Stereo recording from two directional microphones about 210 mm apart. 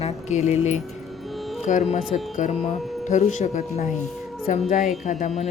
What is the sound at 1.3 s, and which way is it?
Music, centre (ahead or behind).